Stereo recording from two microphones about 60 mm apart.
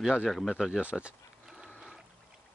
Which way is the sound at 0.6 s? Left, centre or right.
Centre.